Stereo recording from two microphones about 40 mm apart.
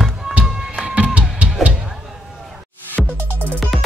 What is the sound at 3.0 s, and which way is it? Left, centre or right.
Music, centre.